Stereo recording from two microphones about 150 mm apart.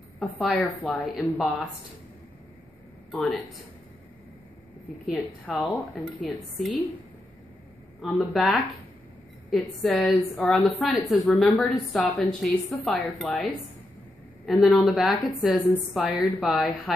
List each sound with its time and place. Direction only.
0.2 s a woman's voice: centre (ahead or behind)
3.1 s speech: centre (ahead or behind)
5.1 s a woman's voice: centre (ahead or behind)
8.0 s a woman's voice: centre (ahead or behind)